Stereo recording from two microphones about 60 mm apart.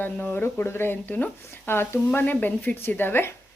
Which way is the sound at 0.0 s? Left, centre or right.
Left.